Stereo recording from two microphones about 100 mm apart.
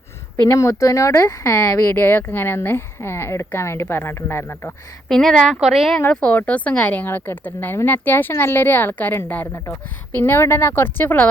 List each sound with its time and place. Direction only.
0.4 s speech: 30° left (ahead or behind)
5.0 s speech: 5° left (ahead or behind)
6.1 s speech: 10° left (ahead or behind)